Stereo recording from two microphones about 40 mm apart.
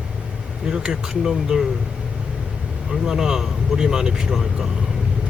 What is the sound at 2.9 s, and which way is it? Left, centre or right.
Speech, centre.